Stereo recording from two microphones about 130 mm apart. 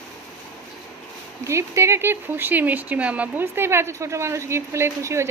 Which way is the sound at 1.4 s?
20° right (ahead or behind).